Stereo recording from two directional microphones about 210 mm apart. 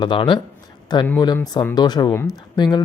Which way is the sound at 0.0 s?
20° left (ahead or behind).